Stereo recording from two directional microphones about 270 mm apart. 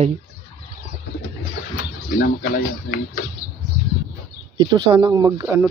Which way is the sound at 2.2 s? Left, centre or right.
Left.